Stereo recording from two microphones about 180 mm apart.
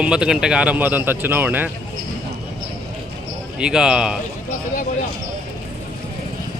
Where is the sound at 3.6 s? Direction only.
5° right (ahead or behind).